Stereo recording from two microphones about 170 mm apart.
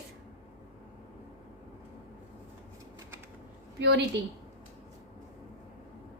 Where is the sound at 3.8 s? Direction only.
90° right.